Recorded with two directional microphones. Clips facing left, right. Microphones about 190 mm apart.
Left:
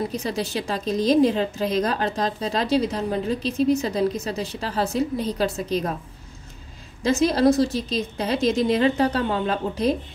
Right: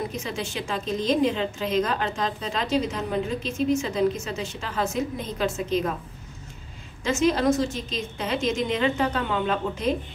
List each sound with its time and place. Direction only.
0.1 s a woman's voice: 35° left (ahead or behind)
7.0 s a woman's voice: 35° left (ahead or behind)